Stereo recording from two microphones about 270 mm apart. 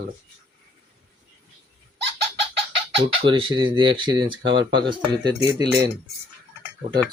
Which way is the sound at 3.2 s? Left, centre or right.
Centre.